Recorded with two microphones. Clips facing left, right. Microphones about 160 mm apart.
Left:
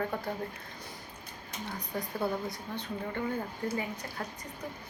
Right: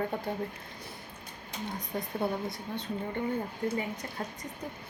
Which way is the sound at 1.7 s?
25° right (ahead or behind).